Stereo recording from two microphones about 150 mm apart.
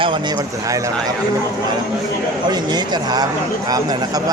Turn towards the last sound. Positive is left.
turn(degrees=-25)  # may be behind; listen again after turning